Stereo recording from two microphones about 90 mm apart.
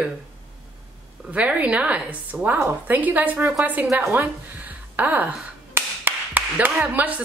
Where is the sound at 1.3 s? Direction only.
15° right (ahead or behind).